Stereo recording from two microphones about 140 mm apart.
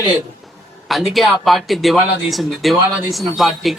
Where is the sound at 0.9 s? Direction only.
Centre (ahead or behind).